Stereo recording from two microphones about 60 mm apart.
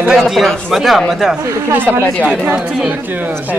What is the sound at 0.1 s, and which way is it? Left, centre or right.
Speech, centre.